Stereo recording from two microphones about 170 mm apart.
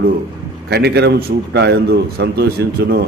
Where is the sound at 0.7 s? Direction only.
70° right (ahead or behind).